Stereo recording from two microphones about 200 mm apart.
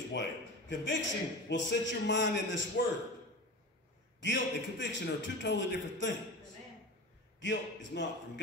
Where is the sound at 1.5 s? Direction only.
65° left (ahead or behind).